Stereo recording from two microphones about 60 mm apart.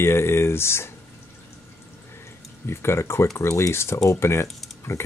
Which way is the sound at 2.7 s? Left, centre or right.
Left.